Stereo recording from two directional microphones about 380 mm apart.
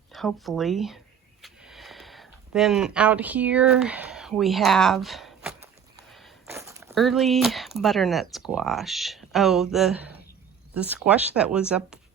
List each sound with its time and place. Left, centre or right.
0.1 s speech: centre
1.4 s a sound: centre
6.1 s speech: centre